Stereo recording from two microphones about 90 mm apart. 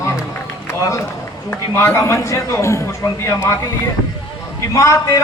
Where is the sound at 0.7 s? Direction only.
35° left (ahead or behind).